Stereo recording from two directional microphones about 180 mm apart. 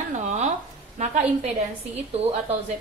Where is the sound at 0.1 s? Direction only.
40° right (ahead or behind).